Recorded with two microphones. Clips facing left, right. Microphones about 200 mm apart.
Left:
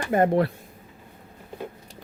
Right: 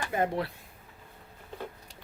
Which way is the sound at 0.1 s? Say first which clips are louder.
Left 10 dB; 55° left (ahead or behind).